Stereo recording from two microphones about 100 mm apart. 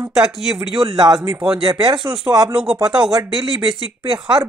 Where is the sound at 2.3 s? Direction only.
30° right (ahead or behind).